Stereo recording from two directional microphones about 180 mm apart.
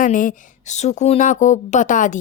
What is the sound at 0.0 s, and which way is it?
A woman's voice, 45° left (ahead or behind).